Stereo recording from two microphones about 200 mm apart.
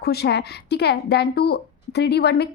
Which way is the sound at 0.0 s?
50° left (ahead or behind).